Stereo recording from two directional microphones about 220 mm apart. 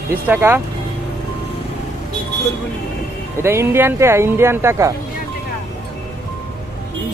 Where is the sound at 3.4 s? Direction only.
10° right (ahead or behind).